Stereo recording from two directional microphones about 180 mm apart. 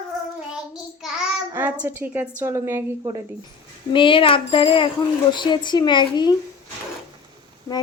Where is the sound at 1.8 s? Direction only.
10° right (ahead or behind).